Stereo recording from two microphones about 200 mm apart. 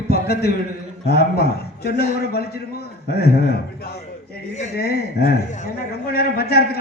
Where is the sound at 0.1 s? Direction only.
50° left (ahead or behind).